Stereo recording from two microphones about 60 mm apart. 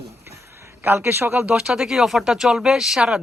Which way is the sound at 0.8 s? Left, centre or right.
Right.